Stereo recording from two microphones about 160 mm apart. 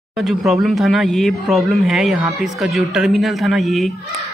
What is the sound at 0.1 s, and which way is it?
Speech, centre (ahead or behind).